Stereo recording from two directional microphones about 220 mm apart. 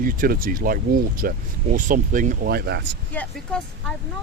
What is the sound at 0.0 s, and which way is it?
Speech, 40° right (ahead or behind).